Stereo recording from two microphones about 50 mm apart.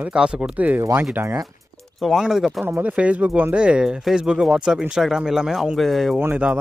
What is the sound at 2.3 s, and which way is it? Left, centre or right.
Speech, centre.